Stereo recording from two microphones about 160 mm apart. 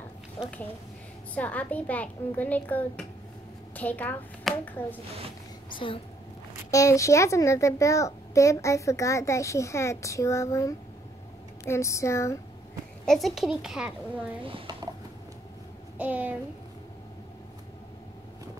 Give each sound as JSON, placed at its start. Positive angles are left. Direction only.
{"t": 1.3, "sound": "a child's voice", "side_deg": 10}
{"t": 5.7, "sound": "a woman's voice", "side_deg": 30}
{"t": 6.7, "sound": "a child's voice", "side_deg": 20}
{"t": 13.0, "sound": "a child's voice", "side_deg": 0}
{"t": 14.4, "sound": "speech", "side_deg": -30}
{"t": 16.0, "sound": "a child's voice", "side_deg": -10}